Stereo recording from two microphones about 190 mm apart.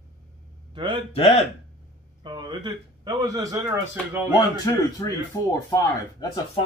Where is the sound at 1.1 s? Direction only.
30° left (ahead or behind).